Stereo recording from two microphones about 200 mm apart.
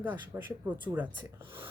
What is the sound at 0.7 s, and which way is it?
Speech, 20° right (ahead or behind).